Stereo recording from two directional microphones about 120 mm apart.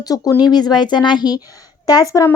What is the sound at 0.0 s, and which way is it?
A woman's voice, 30° left (ahead or behind).